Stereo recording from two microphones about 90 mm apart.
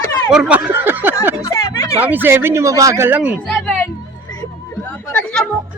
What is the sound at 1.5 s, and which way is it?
Speech, 35° left (ahead or behind).